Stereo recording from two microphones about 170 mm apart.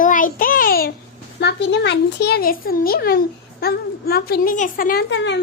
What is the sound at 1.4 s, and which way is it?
A child's voice, 85° left.